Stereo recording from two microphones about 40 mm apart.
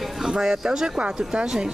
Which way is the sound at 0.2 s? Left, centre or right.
Centre.